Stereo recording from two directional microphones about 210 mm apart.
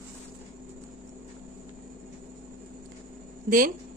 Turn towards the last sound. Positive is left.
turn(degrees=-40)  # may be behind; listen again after turning